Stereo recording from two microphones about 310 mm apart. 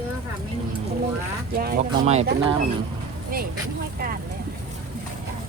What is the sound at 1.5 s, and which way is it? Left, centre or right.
Speech, right.